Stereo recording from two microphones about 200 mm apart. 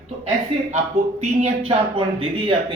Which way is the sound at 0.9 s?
30° right (ahead or behind).